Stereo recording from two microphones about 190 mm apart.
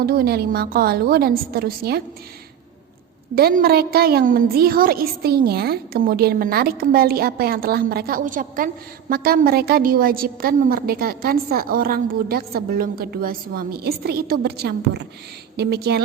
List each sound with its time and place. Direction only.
0.0 s a woman's voice: 55° right (ahead or behind)
3.3 s a woman's voice: 50° right (ahead or behind)